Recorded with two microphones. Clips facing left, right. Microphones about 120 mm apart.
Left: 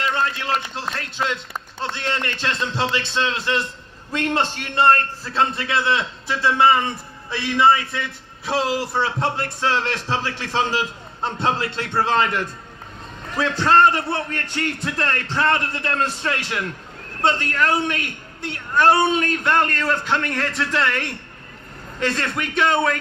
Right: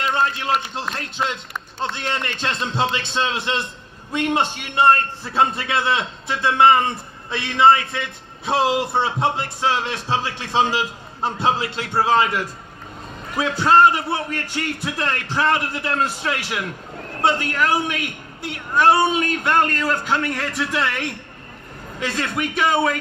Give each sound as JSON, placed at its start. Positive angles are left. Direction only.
{"t": 0.1, "sound": "a man's voice", "side_deg": -20}